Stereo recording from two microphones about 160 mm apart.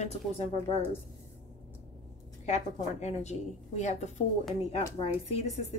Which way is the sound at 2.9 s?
45° left (ahead or behind).